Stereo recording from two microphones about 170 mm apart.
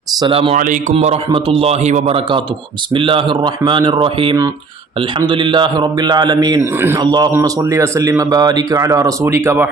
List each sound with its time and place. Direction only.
0.2 s a man's voice: 30° right (ahead or behind)
0.5 s a man's voice: 50° right (ahead or behind)
0.9 s a man's voice: 35° right (ahead or behind); by 7.0 s 15° right (ahead or behind)
7.0 s speech: 25° right (ahead or behind)